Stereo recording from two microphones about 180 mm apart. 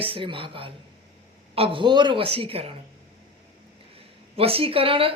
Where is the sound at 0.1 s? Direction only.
30° right (ahead or behind).